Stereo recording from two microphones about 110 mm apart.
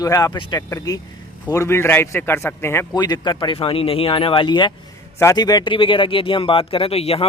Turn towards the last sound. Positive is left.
turn(degrees=65)  # may be behind; listen again after turning